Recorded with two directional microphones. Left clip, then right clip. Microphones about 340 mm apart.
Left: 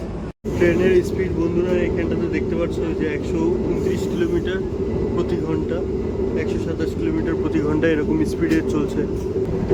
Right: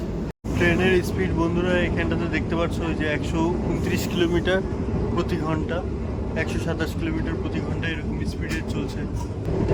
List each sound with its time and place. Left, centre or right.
0.6 s speech: centre
7.5 s speech: centre